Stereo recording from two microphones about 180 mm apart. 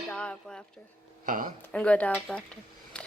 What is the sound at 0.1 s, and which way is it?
Speech, 5° left (ahead or behind).